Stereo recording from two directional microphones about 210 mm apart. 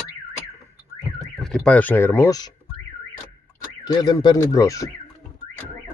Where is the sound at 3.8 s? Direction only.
20° left (ahead or behind).